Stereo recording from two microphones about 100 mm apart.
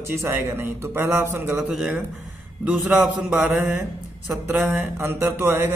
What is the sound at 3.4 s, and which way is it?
Speech, 5° right (ahead or behind).